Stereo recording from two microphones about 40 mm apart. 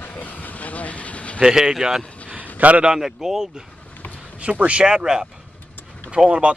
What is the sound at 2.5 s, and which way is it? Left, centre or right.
Speech, right.